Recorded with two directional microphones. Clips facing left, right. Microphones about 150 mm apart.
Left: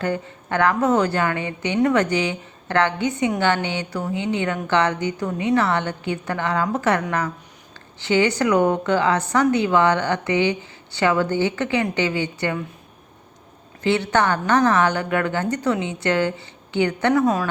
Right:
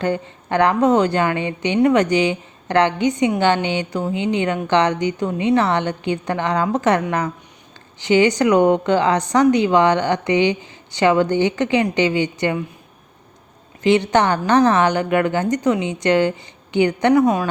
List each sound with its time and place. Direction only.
0.0 s a woman's voice: 20° right (ahead or behind)
13.8 s a woman's voice: 15° right (ahead or behind)